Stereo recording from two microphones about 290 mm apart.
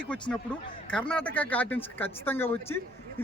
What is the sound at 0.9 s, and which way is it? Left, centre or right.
Speech, centre.